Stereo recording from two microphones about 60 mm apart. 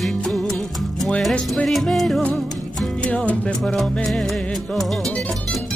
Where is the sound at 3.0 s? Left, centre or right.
Centre.